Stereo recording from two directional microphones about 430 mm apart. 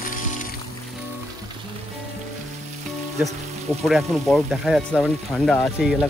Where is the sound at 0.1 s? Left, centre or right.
Centre.